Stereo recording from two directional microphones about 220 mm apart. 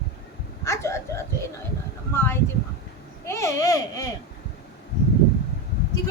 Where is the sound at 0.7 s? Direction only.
15° left (ahead or behind).